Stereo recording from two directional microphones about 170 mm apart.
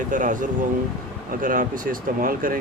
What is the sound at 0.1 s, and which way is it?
Speech, 50° right (ahead or behind).